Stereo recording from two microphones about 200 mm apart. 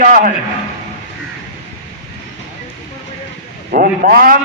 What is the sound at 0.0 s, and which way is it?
Speech, 40° right (ahead or behind).